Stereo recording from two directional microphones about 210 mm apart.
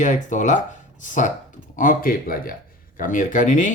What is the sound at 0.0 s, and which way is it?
Speech, 35° left (ahead or behind).